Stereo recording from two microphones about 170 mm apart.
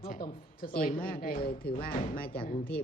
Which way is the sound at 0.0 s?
55° left (ahead or behind).